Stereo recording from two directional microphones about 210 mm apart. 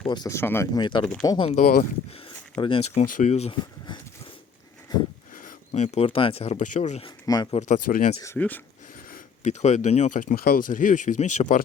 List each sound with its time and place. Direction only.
0.1 s speech: 15° left (ahead or behind)
1.0 s speech: 5° left (ahead or behind)
1.3 s speech: 25° left (ahead or behind)
1.5 s speech: 40° left (ahead or behind)
2.1 s a sound: 25° left (ahead or behind)
2.9 s speech: 35° left (ahead or behind)
5.3 s speech: 40° left (ahead or behind)
7.3 s speech: 20° left (ahead or behind)
7.7 s speech: 40° left (ahead or behind)
8.2 s speech: 10° left (ahead or behind)
9.0 s speech: 40° left (ahead or behind)